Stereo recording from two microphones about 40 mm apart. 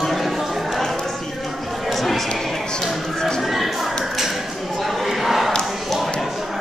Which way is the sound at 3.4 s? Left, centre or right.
Centre.